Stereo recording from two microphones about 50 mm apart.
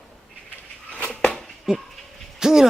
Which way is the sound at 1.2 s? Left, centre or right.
Centre.